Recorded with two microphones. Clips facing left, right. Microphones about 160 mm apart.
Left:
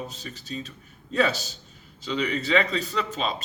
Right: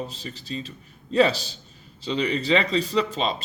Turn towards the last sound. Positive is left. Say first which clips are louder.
# right 4 dB
turn(degrees=-35)  # may be behind; listen again after turning